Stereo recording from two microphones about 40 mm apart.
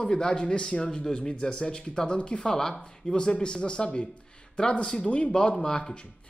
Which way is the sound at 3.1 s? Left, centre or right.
Left.